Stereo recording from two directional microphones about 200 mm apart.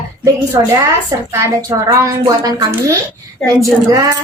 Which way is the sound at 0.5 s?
15° right (ahead or behind).